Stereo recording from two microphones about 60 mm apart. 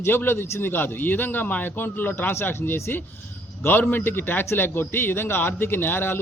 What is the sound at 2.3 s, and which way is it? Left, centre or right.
A man's voice, left.